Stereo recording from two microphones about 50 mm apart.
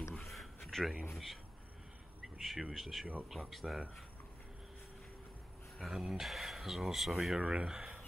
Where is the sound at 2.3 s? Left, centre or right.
Centre.